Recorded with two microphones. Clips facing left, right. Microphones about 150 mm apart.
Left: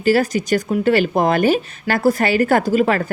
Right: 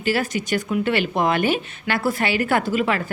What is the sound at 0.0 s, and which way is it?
Speech, 40° left (ahead or behind).